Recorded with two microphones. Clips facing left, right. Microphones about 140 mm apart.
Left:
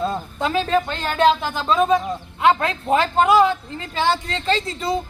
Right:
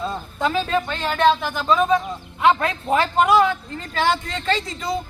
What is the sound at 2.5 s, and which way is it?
Speech, 15° left (ahead or behind).